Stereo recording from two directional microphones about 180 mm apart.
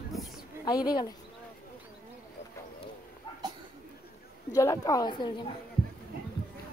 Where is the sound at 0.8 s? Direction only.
20° left (ahead or behind).